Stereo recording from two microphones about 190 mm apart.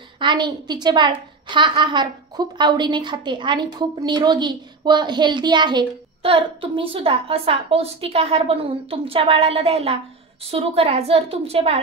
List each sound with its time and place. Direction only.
0.2 s a woman's voice: 25° right (ahead or behind)